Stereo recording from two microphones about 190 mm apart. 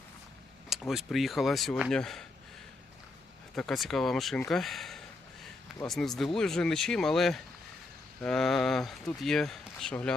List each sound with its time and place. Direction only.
0.7 s speech: centre (ahead or behind)
3.5 s speech: centre (ahead or behind)